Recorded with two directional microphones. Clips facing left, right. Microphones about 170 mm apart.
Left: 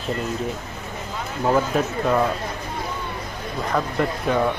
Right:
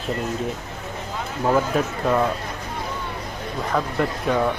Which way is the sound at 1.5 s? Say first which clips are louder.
Even; centre (ahead or behind).